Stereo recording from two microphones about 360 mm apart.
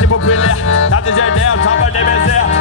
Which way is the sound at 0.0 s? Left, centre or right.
Left.